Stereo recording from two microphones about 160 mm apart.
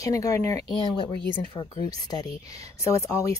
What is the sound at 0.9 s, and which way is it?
Speech, 30° left (ahead or behind).